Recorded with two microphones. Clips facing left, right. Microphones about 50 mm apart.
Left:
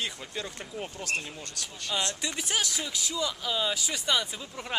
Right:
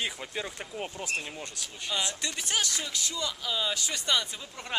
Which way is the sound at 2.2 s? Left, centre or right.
Centre.